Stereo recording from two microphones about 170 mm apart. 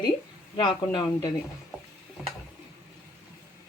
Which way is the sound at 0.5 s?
25° left (ahead or behind).